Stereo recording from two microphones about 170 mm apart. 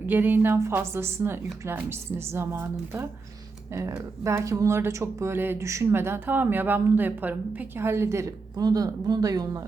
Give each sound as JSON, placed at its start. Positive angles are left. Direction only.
{"t": 0.0, "sound": "a woman's voice", "side_deg": -10}
{"t": 4.2, "sound": "a woman's voice", "side_deg": -15}